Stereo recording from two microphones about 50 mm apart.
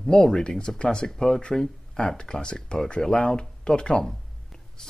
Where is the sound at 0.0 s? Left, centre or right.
Centre.